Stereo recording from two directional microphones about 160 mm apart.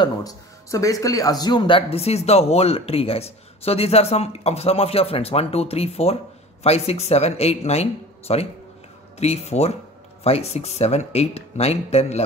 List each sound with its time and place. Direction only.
0.0 s speech: 25° left (ahead or behind); by 12.2 s 40° left (ahead or behind)